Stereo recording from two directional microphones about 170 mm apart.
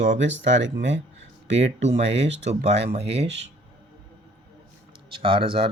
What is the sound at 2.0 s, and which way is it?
Speech, 40° right (ahead or behind).